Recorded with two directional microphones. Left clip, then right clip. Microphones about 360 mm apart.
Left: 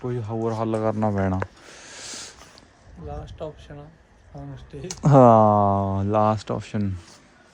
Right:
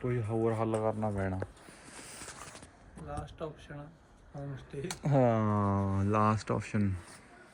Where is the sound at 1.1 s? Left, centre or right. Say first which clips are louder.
Left 11 dB; left.